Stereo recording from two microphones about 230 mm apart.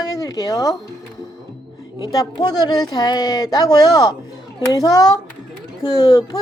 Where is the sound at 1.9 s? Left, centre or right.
Centre.